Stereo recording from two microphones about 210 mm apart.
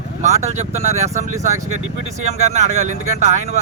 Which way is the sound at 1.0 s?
35° right (ahead or behind).